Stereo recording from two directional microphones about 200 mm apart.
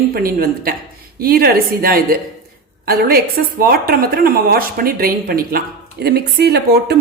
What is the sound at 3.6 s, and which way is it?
Speech, 50° right (ahead or behind).